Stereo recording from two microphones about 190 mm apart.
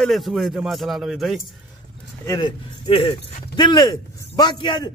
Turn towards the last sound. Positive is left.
turn(degrees=25)  # may be behind; listen again after turning